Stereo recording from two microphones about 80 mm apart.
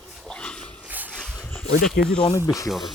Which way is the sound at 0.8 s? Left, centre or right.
Right.